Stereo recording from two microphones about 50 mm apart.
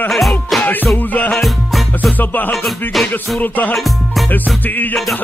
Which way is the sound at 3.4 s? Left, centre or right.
Left.